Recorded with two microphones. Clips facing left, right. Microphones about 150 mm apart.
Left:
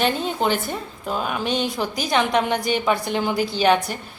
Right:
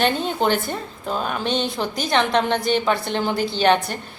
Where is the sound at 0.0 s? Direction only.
Centre (ahead or behind).